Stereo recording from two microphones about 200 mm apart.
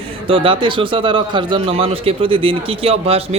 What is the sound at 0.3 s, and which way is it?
Speech, 25° right (ahead or behind).